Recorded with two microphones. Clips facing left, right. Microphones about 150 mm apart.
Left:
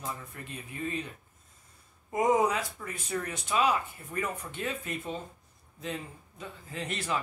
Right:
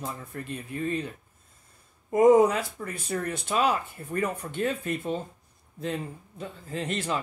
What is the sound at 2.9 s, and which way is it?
Speech, 35° right (ahead or behind).